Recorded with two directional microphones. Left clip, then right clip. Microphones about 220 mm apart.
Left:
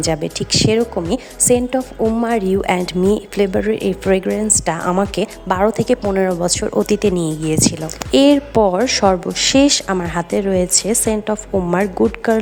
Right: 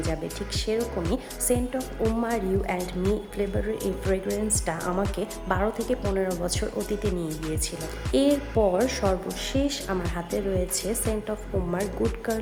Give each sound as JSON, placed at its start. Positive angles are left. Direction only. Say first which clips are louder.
{"t": 0.0, "sound": "a woman's voice", "louder": "left 11 dB", "side_deg": 45}